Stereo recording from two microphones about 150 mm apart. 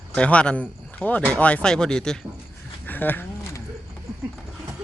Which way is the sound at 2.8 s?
10° left (ahead or behind).